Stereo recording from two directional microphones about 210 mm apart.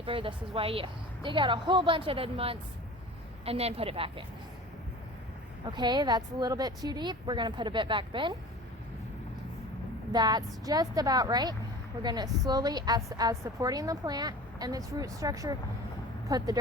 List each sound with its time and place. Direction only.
0.0 s a woman's voice: 25° right (ahead or behind)
5.7 s a woman's voice: 20° right (ahead or behind)
10.1 s a woman's voice: 20° right (ahead or behind)